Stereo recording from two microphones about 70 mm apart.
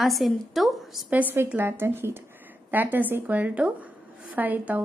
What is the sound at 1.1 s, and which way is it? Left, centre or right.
A woman's voice, right.